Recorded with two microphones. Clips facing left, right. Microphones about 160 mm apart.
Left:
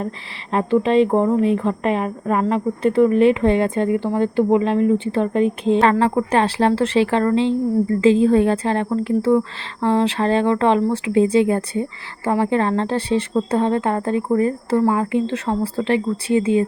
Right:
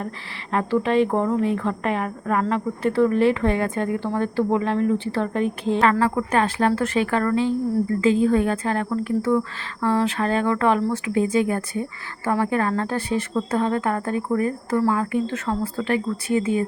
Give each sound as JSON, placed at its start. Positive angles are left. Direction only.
{"t": 0.5, "sound": "a woman's voice", "side_deg": 20}